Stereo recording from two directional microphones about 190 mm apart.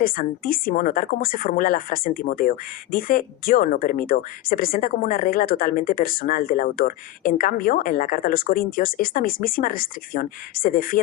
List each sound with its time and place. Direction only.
0.0 s a woman's voice: 50° left (ahead or behind)